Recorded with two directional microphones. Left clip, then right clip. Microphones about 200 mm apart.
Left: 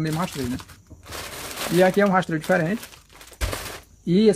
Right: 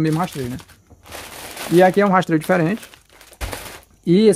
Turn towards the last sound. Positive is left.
turn(degrees=-45)  # may be behind; listen again after turning